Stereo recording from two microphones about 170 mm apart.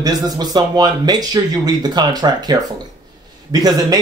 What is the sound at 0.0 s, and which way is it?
Speech, 25° right (ahead or behind).